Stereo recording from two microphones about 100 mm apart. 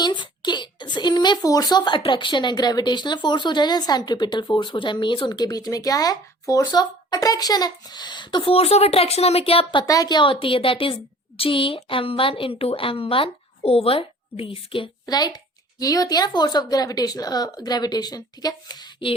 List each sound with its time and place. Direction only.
0.0 s a woman's voice: 50° left (ahead or behind); by 9.8 s 70° left (ahead or behind)
9.8 s a woman's voice: 35° left (ahead or behind); by 14.8 s 65° left (ahead or behind)
15.0 s speech: 40° left (ahead or behind)